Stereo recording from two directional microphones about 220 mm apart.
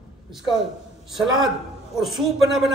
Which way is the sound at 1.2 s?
Centre (ahead or behind).